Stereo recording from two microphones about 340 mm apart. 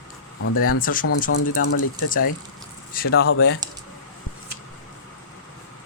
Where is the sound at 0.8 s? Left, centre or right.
Left.